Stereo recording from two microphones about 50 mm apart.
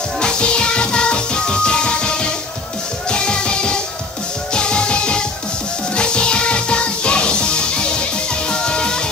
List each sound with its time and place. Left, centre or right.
0.2 s music: centre